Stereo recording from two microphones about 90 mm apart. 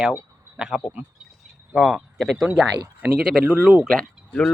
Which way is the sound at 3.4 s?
15° right (ahead or behind).